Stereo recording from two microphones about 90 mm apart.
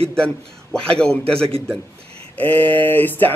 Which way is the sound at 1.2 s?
90° right.